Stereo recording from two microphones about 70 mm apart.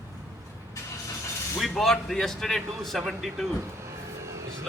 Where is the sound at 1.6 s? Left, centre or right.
Centre.